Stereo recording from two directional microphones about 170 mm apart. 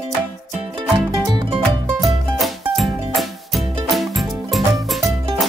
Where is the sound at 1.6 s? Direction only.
Centre (ahead or behind).